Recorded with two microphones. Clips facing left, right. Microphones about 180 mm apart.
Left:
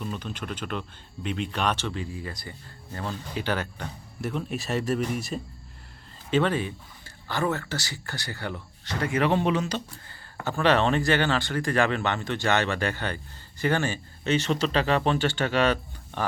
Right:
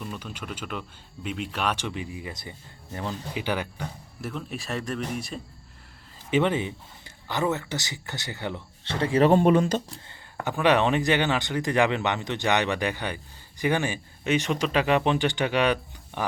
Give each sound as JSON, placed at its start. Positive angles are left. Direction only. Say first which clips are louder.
{"t": 0.0, "sound": "speech", "louder": "left 2 dB", "side_deg": -5}
{"t": 4.2, "sound": "speech", "louder": "left 4 dB", "side_deg": 0}
{"t": 6.3, "sound": "speech", "louder": "right 1 dB", "side_deg": -20}
{"t": 10.1, "sound": "speech", "louder": "right 1 dB", "side_deg": -15}